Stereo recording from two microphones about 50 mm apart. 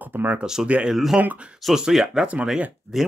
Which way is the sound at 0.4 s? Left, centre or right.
Centre.